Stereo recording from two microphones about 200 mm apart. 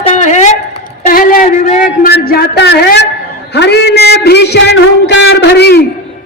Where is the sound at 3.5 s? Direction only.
60° left (ahead or behind).